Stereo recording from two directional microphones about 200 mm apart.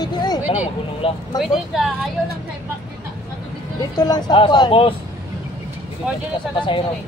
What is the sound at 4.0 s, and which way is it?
Speech, 20° left (ahead or behind).